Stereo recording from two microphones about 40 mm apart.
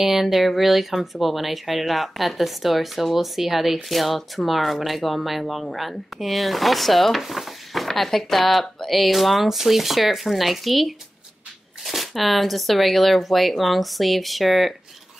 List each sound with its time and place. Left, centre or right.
0.0 s speech: centre